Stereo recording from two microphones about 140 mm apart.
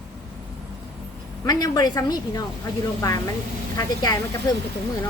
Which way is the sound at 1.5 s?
30° left (ahead or behind).